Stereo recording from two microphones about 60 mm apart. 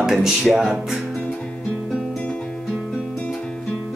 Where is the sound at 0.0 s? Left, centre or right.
Centre.